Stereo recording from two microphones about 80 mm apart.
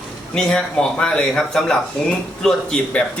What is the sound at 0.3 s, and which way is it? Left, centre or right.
Speech, centre.